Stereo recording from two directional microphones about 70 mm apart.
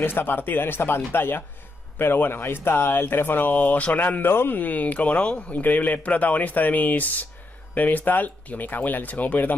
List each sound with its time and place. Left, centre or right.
0.0 s speech: left